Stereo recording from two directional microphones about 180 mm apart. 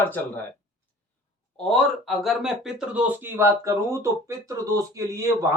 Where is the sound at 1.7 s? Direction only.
Centre (ahead or behind).